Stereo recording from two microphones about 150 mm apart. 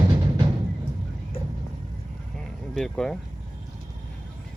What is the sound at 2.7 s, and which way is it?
Speech, 5° left (ahead or behind).